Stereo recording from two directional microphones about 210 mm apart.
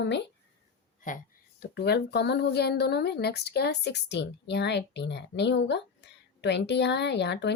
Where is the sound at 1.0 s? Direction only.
45° left (ahead or behind).